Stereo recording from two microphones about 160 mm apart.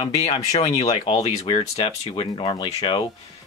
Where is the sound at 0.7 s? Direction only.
35° left (ahead or behind).